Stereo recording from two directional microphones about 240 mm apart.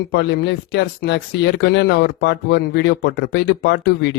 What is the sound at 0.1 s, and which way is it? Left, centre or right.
Speech, left.